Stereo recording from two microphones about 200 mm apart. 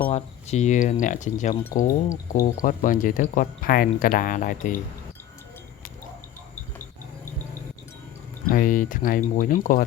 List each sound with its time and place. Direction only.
0.1 s speech: 35° left (ahead or behind)
8.4 s speech: 45° left (ahead or behind)